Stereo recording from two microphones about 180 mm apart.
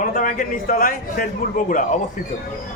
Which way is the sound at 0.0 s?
50° left (ahead or behind).